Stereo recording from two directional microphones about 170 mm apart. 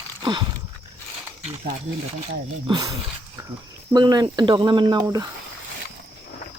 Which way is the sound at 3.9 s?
25° right (ahead or behind).